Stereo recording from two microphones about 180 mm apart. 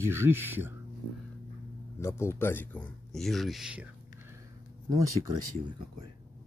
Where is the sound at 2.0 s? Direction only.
15° left (ahead or behind); by 4.3 s 5° right (ahead or behind).